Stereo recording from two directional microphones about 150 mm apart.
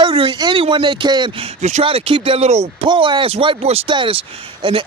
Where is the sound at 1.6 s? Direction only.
45° right (ahead or behind).